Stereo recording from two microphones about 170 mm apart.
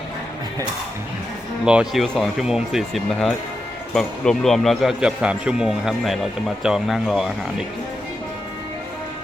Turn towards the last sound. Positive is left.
turn(degrees=0)  # may be behind; listen again after turning